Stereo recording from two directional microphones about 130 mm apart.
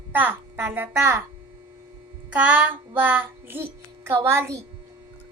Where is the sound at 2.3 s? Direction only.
15° right (ahead or behind).